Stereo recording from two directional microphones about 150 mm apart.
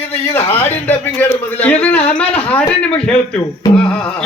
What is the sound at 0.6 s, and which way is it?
Speech, 15° left (ahead or behind).